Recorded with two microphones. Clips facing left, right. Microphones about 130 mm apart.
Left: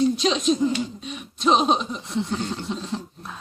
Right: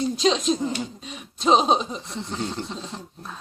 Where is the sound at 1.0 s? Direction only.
25° right (ahead or behind).